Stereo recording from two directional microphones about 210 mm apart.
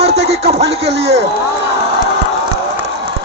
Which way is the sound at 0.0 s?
30° right (ahead or behind).